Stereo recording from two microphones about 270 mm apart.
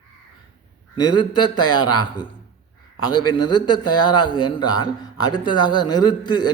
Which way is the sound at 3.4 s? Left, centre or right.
Left.